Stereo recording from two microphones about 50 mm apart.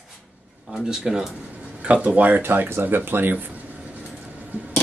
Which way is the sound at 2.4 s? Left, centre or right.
Right.